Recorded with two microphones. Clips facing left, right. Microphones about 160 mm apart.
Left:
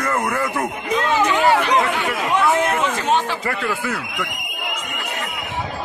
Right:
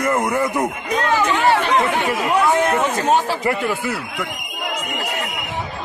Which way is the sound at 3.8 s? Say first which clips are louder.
Right 1 dB; 10° right (ahead or behind).